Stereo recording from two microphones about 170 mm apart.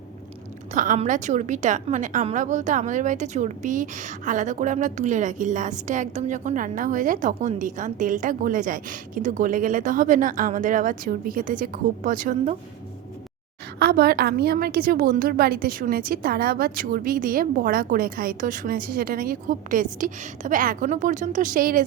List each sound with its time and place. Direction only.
0.7 s a woman's voice: 45° right (ahead or behind)
13.7 s a woman's voice: 65° right (ahead or behind)